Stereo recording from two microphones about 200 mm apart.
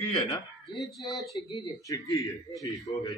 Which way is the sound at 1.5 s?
15° left (ahead or behind).